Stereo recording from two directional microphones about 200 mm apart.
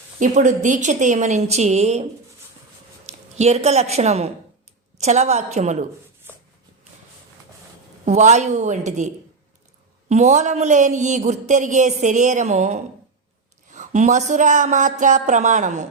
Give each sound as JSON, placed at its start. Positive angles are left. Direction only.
{"t": 0.2, "sound": "speech", "side_deg": -40}
{"t": 3.1, "sound": "a woman's voice", "side_deg": -35}
{"t": 8.0, "sound": "speech", "side_deg": -35}
{"t": 10.1, "sound": "speech", "side_deg": -35}